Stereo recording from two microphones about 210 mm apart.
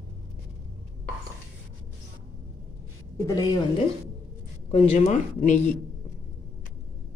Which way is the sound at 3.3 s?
15° left (ahead or behind).